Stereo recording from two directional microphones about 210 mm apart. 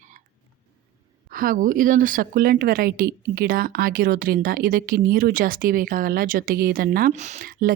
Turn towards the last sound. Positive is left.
turn(degrees=-40)  # may be behind; listen again after turning